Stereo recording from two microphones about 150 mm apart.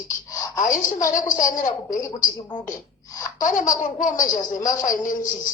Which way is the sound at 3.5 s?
60° left (ahead or behind).